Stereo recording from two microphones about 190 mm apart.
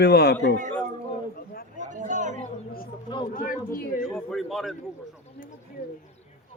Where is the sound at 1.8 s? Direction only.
40° right (ahead or behind).